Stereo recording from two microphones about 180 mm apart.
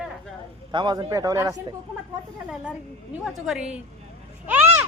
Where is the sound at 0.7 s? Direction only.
25° right (ahead or behind).